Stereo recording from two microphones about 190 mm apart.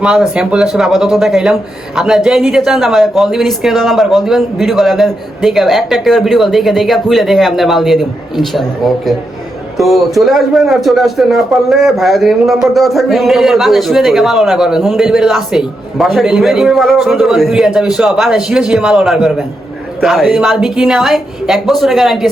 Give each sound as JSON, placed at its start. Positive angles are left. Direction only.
{"t": 0.0, "sound": "a man's voice", "side_deg": -5}
{"t": 9.7, "sound": "a man's voice", "side_deg": 0}